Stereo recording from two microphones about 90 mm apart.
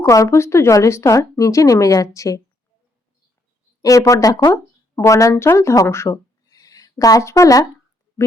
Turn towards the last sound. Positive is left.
turn(degrees=35)  # may be behind; listen again after turning